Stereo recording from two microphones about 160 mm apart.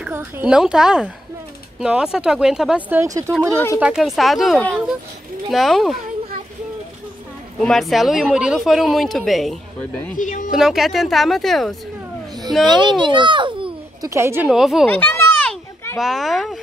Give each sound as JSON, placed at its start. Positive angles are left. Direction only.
{"t": 0.0, "sound": "speech", "side_deg": -10}
{"t": 3.0, "sound": "a child's voice", "side_deg": -20}
{"t": 3.5, "sound": "speech", "side_deg": 15}
{"t": 3.8, "sound": "speech", "side_deg": 0}
{"t": 7.6, "sound": "speech", "side_deg": 0}
{"t": 10.1, "sound": "speech", "side_deg": 55}
{"t": 10.5, "sound": "speech", "side_deg": 0}
{"t": 12.6, "sound": "a child's voice", "side_deg": -30}
{"t": 14.0, "sound": "a woman's voice", "side_deg": -15}
{"t": 14.5, "sound": "speech", "side_deg": 0}
{"t": 14.9, "sound": "children playing", "side_deg": 10}
{"t": 16.0, "sound": "speech", "side_deg": 0}